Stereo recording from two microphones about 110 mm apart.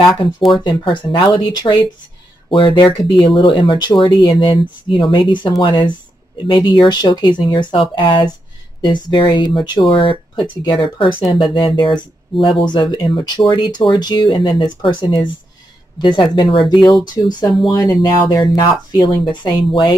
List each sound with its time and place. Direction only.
0.1 s speech: centre (ahead or behind)
0.7 s speech: 45° left (ahead or behind)